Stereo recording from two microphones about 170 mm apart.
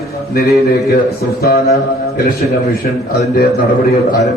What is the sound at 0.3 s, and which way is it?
Speech, 65° left (ahead or behind).